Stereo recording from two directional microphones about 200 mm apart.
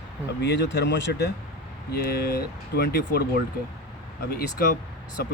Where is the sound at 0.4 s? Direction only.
55° left (ahead or behind).